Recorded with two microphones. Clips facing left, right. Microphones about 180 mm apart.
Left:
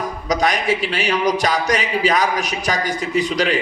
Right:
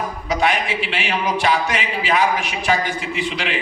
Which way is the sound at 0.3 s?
40° left (ahead or behind).